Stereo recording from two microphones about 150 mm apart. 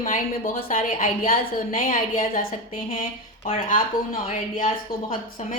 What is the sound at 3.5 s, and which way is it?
Speech, 65° left (ahead or behind).